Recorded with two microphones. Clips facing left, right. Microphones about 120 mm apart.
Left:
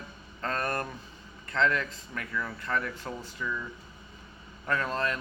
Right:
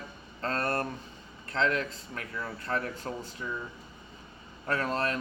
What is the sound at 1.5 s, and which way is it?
Speech, 30° right (ahead or behind).